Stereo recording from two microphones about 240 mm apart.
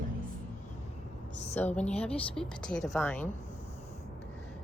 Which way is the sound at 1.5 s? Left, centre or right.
Centre.